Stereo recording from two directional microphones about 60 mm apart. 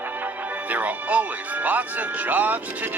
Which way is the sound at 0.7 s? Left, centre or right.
Right.